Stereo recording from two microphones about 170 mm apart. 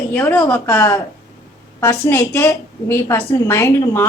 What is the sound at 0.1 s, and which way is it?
A woman's voice, 15° left (ahead or behind).